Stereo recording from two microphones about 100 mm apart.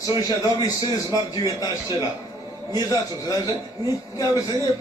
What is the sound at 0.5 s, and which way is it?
A man's voice, 40° left (ahead or behind).